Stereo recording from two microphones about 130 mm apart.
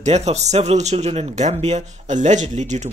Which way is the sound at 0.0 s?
60° right (ahead or behind).